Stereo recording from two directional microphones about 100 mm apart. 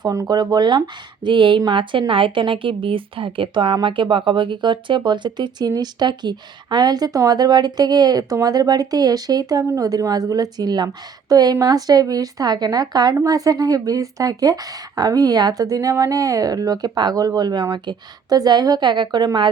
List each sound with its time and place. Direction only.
0.0 s a woman's voice: 35° right (ahead or behind)